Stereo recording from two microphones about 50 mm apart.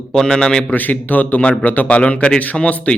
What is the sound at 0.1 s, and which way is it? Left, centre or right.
Speech, centre.